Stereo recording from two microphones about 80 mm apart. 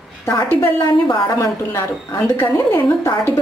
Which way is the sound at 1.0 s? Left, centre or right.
Left.